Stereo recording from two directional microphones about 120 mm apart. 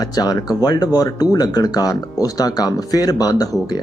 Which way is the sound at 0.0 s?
35° left (ahead or behind).